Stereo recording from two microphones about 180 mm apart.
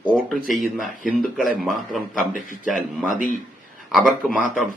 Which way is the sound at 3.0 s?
50° right (ahead or behind).